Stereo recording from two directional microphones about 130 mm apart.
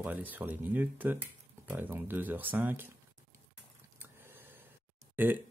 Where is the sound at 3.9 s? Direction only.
15° right (ahead or behind).